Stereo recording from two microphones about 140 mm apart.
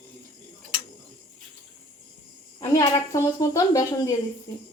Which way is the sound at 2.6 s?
20° left (ahead or behind).